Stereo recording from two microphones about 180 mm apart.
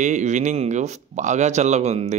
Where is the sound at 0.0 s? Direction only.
40° right (ahead or behind).